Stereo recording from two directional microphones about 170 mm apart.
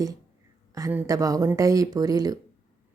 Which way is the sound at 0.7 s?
20° right (ahead or behind).